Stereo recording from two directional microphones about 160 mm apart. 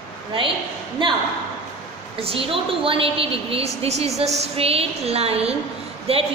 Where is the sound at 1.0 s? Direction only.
30° right (ahead or behind).